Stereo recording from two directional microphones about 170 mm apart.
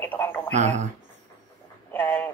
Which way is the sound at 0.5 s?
40° right (ahead or behind).